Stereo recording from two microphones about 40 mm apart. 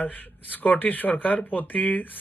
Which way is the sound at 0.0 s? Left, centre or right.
Left.